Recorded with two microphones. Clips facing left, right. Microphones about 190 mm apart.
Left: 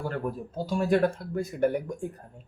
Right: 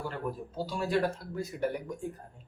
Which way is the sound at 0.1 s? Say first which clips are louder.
Left 4 dB; 50° left (ahead or behind).